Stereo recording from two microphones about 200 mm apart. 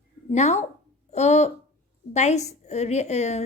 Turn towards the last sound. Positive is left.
turn(degrees=35)  # may be behind; listen again after turning